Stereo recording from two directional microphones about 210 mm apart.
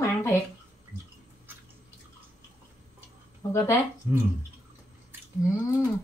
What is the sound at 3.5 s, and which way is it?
Speech, 15° left (ahead or behind).